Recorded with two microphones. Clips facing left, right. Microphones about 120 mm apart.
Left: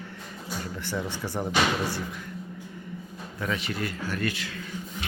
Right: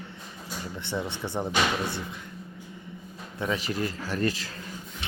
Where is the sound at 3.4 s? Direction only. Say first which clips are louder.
Right 2 dB; 35° right (ahead or behind).